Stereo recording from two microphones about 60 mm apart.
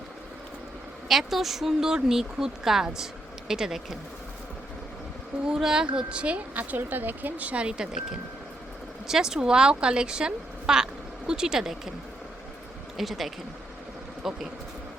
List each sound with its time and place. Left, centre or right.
1.0 s a woman's voice: centre
5.5 s speech: centre
9.0 s a woman's voice: centre
13.0 s a woman's voice: centre